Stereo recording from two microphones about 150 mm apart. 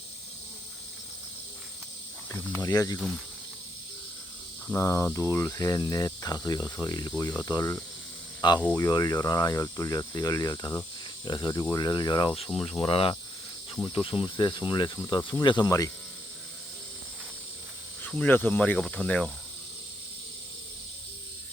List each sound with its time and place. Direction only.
2.3 s speech: 20° left (ahead or behind)
4.7 s speech: 20° left (ahead or behind)
18.0 s speech: 10° left (ahead or behind)